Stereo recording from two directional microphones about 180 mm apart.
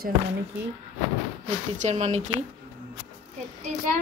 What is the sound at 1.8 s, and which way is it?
Speech, 40° right (ahead or behind).